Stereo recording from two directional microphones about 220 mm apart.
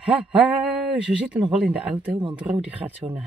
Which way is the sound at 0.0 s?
5° right (ahead or behind).